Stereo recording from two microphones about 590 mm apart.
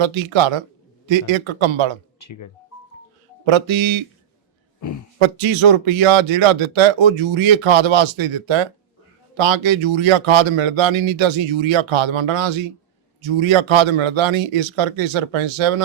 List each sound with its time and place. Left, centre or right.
0.0 s a man's voice: right
2.1 s speech: left
3.4 s a man's voice: right
5.2 s a man's voice: right